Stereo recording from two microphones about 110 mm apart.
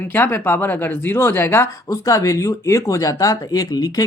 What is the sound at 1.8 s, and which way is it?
Speech, 30° left (ahead or behind).